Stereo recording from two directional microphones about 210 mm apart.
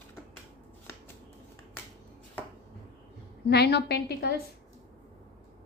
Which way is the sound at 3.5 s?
50° left (ahead or behind).